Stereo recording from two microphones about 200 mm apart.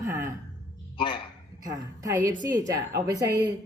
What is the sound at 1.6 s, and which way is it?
A man's voice, 15° right (ahead or behind).